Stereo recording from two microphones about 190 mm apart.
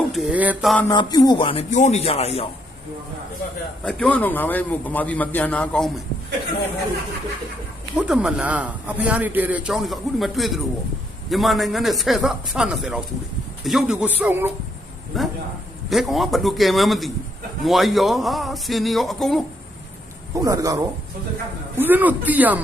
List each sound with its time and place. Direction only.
0.1 s a man's voice: 5° right (ahead or behind)
0.9 s speech: 20° left (ahead or behind)
3.8 s a man's voice: 5° left (ahead or behind)
7.9 s a man's voice: 5° right (ahead or behind)
15.1 s a man's voice: centre (ahead or behind)
20.3 s a man's voice: 15° right (ahead or behind)